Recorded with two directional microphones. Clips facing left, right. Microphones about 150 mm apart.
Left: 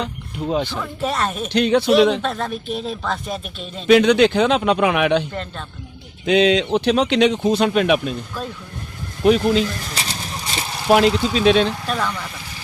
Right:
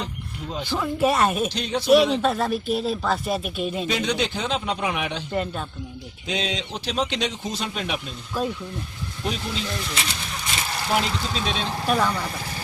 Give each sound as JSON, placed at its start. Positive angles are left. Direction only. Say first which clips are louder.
{"t": 0.0, "sound": "speech", "louder": "left 7 dB", "side_deg": 65}
{"t": 0.7, "sound": "speech", "louder": "right 3 dB", "side_deg": -10}
{"t": 1.5, "sound": "speech", "louder": "left 10 dB", "side_deg": 65}
{"t": 2.2, "sound": "speech", "louder": "right 2 dB", "side_deg": -5}
{"t": 3.8, "sound": "a man's voice", "louder": "left 17 dB", "side_deg": 70}
{"t": 5.3, "sound": "speech", "louder": "right 3 dB", "side_deg": -10}
{"t": 6.2, "sound": "speech", "louder": "left 13 dB", "side_deg": 65}
{"t": 8.4, "sound": "speech", "louder": "right 3 dB", "side_deg": -15}
{"t": 9.2, "sound": "a sound", "louder": "left 14 dB", "side_deg": 60}
{"t": 10.9, "sound": "a man's voice", "louder": "left 10 dB", "side_deg": 75}
{"t": 11.9, "sound": "speech", "louder": "right 2 dB", "side_deg": -10}